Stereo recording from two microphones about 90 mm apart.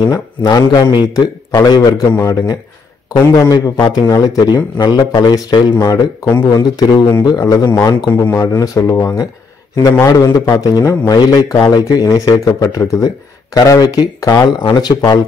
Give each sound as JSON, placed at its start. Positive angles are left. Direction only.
{"t": 0.0, "sound": "a man's voice", "side_deg": 45}
{"t": 2.1, "sound": "a man's voice", "side_deg": 35}
{"t": 4.7, "sound": "a man's voice", "side_deg": 55}
{"t": 8.1, "sound": "a man's voice", "side_deg": 30}